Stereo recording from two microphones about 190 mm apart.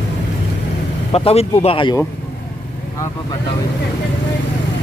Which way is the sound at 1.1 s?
30° left (ahead or behind).